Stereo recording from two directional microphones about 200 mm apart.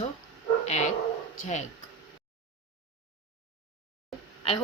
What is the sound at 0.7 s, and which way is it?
Speech, 35° left (ahead or behind).